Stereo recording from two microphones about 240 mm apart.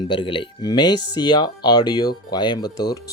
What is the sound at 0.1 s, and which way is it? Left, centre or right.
Speech, centre.